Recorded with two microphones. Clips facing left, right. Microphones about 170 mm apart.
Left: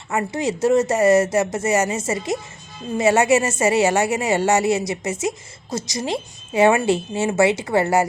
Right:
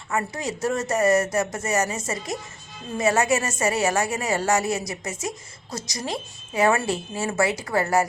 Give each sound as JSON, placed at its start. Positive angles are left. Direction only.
{"t": 0.1, "sound": "speech", "side_deg": 25}